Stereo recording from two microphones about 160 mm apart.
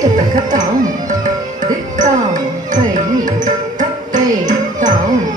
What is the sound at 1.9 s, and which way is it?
Music, 55° right (ahead or behind).